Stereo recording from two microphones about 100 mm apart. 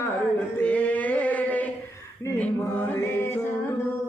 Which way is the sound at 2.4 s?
15° left (ahead or behind).